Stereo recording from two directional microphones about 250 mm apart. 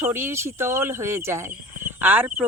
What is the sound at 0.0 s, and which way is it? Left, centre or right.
Speech, centre.